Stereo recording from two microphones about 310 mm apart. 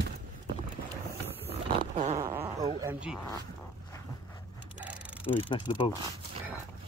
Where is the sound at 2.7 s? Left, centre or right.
Centre.